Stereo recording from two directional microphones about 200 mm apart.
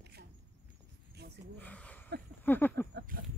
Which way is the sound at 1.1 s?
55° right (ahead or behind).